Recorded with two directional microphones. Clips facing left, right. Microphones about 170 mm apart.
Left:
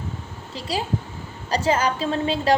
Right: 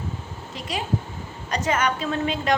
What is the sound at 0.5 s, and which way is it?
A woman's voice, 30° left (ahead or behind).